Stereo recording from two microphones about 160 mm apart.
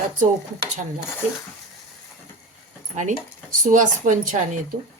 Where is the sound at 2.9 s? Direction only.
50° right (ahead or behind).